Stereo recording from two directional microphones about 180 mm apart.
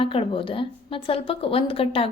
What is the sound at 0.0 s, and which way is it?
A woman's voice, 30° left (ahead or behind).